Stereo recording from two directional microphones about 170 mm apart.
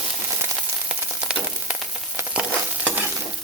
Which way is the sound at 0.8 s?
5° right (ahead or behind).